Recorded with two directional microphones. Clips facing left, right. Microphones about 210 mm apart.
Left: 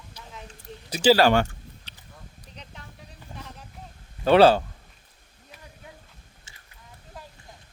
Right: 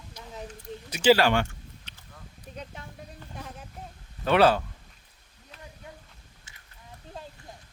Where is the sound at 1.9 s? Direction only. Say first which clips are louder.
Left 1 dB; 35° left (ahead or behind).